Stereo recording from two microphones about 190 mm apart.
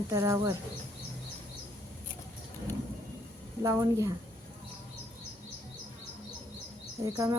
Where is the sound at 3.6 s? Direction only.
15° right (ahead or behind).